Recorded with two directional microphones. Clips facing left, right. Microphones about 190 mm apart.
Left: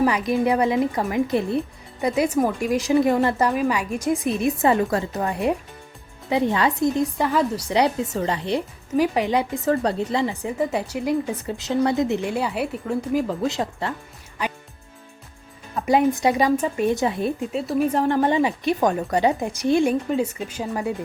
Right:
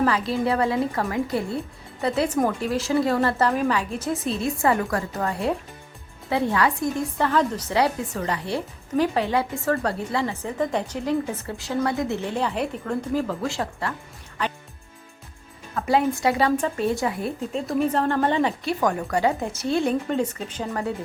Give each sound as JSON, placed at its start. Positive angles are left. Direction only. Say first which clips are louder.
{"t": 0.0, "sound": "a woman's voice", "louder": "left 2 dB", "side_deg": 15}
{"t": 13.2, "sound": "a woman's voice", "louder": "left 3 dB", "side_deg": 20}
{"t": 15.7, "sound": "a woman's voice", "louder": "left 3 dB", "side_deg": 15}
{"t": 17.5, "sound": "a woman's voice", "louder": "right 1 dB", "side_deg": 10}